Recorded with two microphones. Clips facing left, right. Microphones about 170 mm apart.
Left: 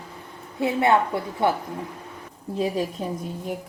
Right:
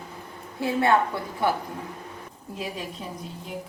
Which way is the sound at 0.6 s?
25° left (ahead or behind).